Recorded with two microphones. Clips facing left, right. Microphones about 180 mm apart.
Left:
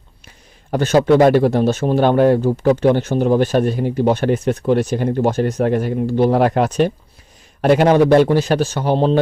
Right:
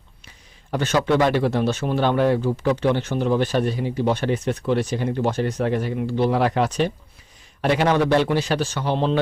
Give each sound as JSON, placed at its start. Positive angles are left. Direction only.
{"t": 0.7, "sound": "speech", "side_deg": 45}